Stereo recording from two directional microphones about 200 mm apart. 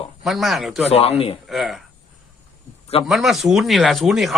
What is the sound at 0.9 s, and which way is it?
Speech, 30° left (ahead or behind).